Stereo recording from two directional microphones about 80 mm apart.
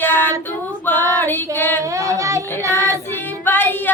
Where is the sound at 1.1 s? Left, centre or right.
Left.